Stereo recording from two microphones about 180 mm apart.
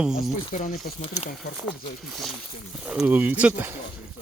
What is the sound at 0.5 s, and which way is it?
Speech, 45° left (ahead or behind).